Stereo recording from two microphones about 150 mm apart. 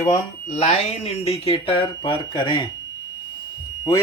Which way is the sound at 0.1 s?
50° left (ahead or behind).